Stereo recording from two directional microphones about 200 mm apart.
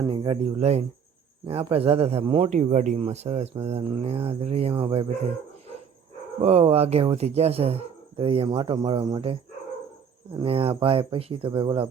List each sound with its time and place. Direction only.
0.1 s speech: 25° right (ahead or behind)
6.4 s speech: 30° right (ahead or behind)
10.4 s speech: 30° right (ahead or behind)